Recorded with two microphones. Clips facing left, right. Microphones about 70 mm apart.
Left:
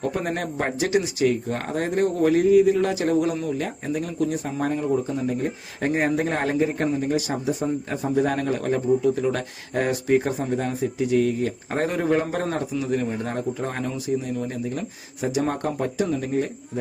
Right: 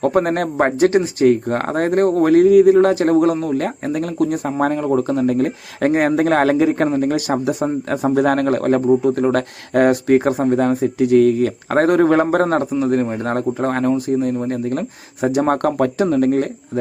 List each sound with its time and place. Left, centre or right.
0.0 s speech: right